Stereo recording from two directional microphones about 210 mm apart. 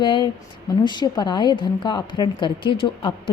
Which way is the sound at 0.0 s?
20° left (ahead or behind).